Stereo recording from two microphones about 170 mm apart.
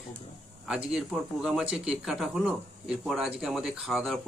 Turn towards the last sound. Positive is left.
turn(degrees=0)  # may be behind; listen again after turning